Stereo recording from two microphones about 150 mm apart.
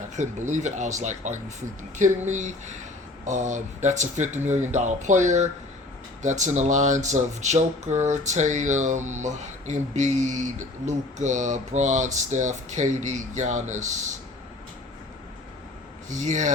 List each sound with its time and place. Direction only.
0.2 s speech: 55° right (ahead or behind)
16.0 s speech: 55° right (ahead or behind)